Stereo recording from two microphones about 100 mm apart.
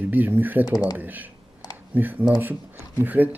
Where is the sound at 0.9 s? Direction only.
15° right (ahead or behind).